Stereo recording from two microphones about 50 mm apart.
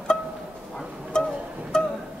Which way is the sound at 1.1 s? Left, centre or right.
Centre.